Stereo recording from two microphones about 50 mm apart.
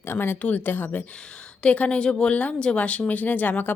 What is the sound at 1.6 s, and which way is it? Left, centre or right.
A woman's voice, left.